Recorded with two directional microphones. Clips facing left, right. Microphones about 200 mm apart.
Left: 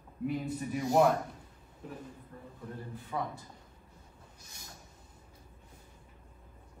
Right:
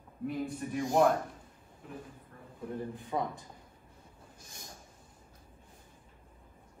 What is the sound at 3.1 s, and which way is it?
Speech, 25° right (ahead or behind).